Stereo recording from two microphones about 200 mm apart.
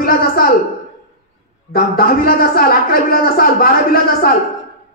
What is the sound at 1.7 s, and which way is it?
Speech, 50° left (ahead or behind).